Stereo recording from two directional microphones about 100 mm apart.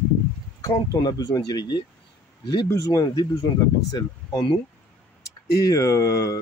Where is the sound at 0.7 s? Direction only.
40° left (ahead or behind).